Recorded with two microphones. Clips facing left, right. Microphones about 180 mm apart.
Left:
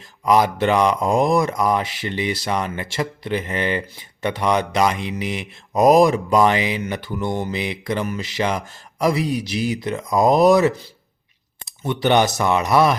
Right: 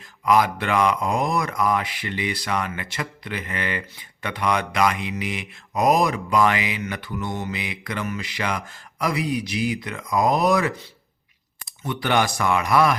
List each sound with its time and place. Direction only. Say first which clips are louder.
0.3 s speech: left 3 dB; 25° left (ahead or behind)